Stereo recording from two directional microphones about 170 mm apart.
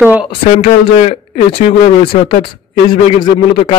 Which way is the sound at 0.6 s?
35° left (ahead or behind).